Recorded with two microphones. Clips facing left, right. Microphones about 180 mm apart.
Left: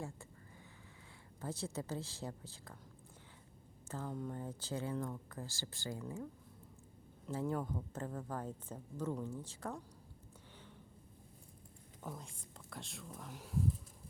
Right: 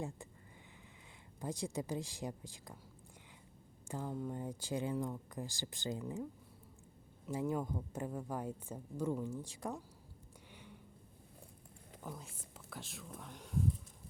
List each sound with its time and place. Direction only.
1.4 s speech: 15° right (ahead or behind)
3.8 s speech: 15° right (ahead or behind)
7.3 s speech: 15° right (ahead or behind)
12.0 s speech: 5° right (ahead or behind)